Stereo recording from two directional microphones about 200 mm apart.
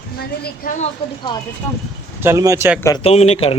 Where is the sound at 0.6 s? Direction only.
40° left (ahead or behind).